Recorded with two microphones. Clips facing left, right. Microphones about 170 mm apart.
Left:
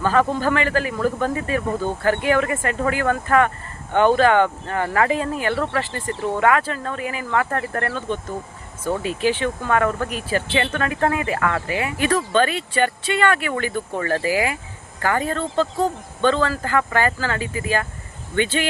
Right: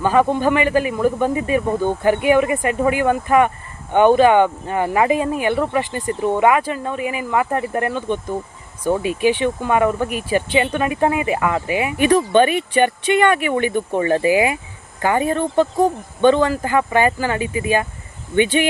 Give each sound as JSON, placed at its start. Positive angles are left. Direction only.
{"t": 0.0, "sound": "speech", "side_deg": -15}